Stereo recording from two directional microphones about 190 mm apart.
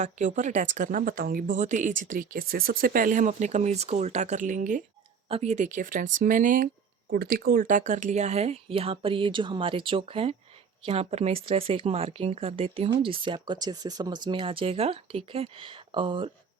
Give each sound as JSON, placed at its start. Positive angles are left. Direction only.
{"t": 0.0, "sound": "speech", "side_deg": -40}